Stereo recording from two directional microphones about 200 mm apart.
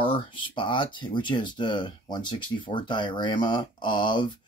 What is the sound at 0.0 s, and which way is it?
Speech, 25° left (ahead or behind).